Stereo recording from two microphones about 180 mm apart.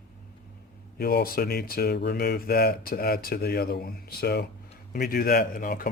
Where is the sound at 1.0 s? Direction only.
60° left (ahead or behind).